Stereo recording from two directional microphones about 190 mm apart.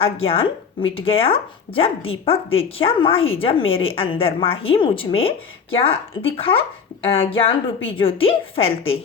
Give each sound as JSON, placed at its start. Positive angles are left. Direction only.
{"t": 0.0, "sound": "speech", "side_deg": 30}